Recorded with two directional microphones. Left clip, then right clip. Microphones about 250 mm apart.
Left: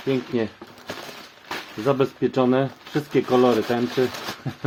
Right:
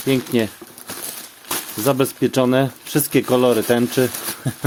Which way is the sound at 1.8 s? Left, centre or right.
Right.